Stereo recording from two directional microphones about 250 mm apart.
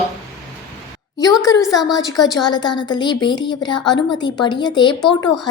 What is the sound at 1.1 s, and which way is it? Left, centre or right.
A woman's voice, centre.